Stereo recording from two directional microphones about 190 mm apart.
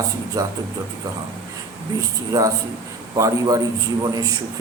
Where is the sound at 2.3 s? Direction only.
20° right (ahead or behind).